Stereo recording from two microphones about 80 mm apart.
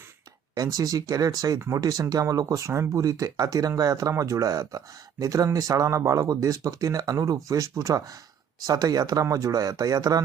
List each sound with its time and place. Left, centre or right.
0.5 s speech: right
1.5 s speech: right
1.8 s speech: right